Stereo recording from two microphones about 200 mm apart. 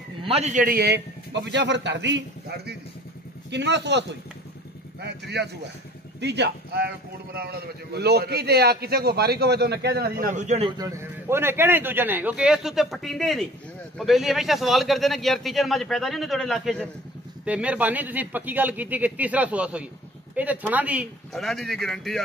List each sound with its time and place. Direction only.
0.2 s a man's voice: 30° right (ahead or behind); by 4.0 s 60° right (ahead or behind)
5.0 s a man's voice: 55° right (ahead or behind); by 10.7 s 35° right (ahead or behind)
10.8 s a man's voice: 15° right (ahead or behind); by 22.2 s centre (ahead or behind)